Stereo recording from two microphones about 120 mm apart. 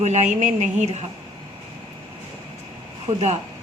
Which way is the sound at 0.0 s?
75° right (ahead or behind).